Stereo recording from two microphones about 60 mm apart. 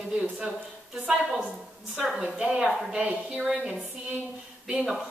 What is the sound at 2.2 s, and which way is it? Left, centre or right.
A woman's voice, centre.